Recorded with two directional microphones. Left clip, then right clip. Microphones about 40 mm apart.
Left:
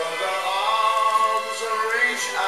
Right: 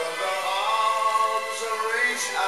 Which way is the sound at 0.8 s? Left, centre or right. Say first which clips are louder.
Left 4 dB; centre.